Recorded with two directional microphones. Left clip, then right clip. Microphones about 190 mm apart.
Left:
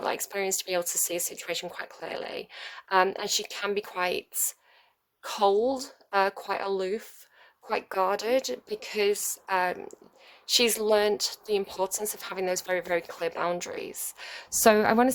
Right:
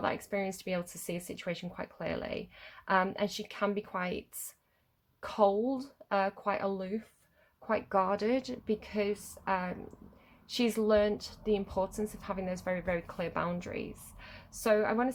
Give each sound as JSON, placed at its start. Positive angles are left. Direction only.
{"t": 0.1, "sound": "a woman's voice", "side_deg": 40}
{"t": 7.7, "sound": "a woman's voice", "side_deg": 40}